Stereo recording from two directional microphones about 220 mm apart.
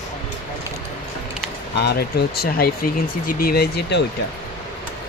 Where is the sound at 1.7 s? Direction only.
45° left (ahead or behind).